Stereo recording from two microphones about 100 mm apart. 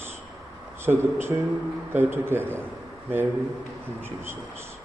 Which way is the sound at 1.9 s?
25° right (ahead or behind).